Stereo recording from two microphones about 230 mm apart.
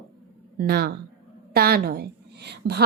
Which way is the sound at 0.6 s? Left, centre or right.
Right.